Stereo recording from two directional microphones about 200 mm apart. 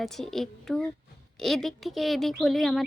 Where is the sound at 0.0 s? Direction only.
Centre (ahead or behind).